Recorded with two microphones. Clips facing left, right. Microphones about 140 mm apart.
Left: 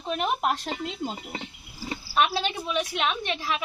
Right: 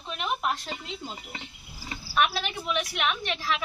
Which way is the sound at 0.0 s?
45° left (ahead or behind).